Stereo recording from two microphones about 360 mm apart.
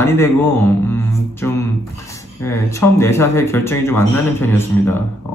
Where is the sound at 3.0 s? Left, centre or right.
Centre.